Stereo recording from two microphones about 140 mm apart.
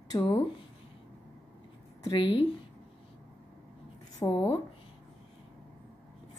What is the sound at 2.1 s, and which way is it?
Speech, 40° left (ahead or behind).